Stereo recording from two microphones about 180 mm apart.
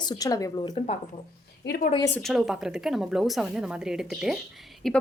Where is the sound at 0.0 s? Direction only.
20° left (ahead or behind).